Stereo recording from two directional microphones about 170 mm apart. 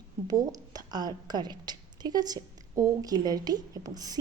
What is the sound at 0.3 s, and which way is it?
A woman's voice, 20° right (ahead or behind).